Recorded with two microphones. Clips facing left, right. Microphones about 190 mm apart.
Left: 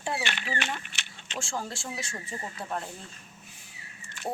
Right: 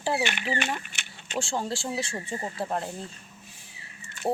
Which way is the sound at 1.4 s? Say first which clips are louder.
Right 4 dB; 30° right (ahead or behind).